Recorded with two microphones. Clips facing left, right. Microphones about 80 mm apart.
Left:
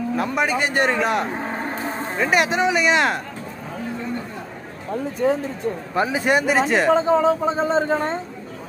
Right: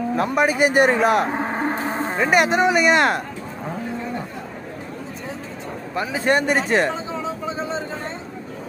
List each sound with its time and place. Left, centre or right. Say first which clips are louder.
0.1 s a man's voice: right 2 dB; centre
1.3 s a sound: right 4 dB; right
2.1 s a man's voice: right 2 dB; centre
5.2 s speech: left 16 dB; left
5.9 s a man's voice: left 3 dB; left
6.2 s a man's voice: right 2 dB; centre
6.9 s speech: left 10 dB; left